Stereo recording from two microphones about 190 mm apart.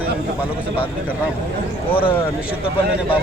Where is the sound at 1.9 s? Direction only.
25° left (ahead or behind).